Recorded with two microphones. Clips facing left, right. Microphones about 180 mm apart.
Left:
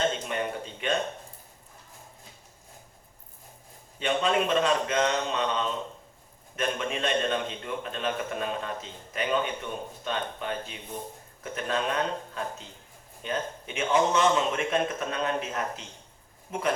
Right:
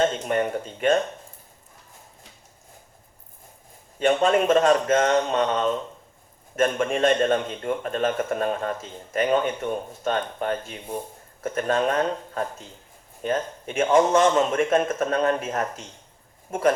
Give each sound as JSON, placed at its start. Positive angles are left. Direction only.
{"t": 0.3, "sound": "a man's voice", "side_deg": -45}
{"t": 4.0, "sound": "a man's voice", "side_deg": -45}